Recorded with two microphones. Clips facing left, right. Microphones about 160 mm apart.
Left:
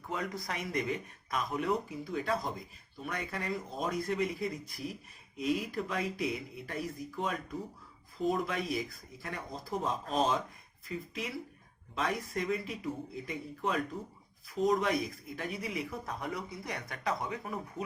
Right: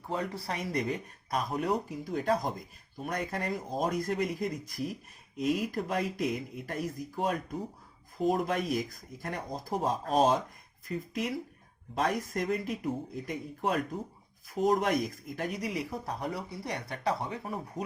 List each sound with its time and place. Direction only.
0.1 s speech: 30° right (ahead or behind)
14.8 s speech: 45° right (ahead or behind)